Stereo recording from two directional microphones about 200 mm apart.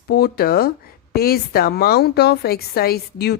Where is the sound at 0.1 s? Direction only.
50° left (ahead or behind).